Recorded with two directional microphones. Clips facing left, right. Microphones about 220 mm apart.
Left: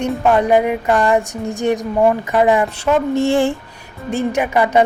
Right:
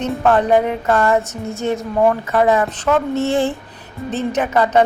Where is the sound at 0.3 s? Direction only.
10° left (ahead or behind).